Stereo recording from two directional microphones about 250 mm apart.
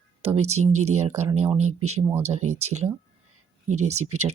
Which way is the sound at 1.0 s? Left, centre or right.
Right.